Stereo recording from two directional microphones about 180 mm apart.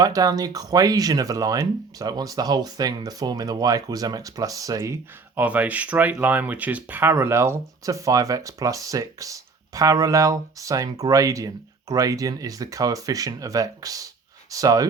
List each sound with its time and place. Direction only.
0.0 s speech: 20° right (ahead or behind)